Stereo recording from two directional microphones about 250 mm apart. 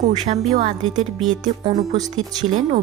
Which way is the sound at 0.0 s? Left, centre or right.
Right.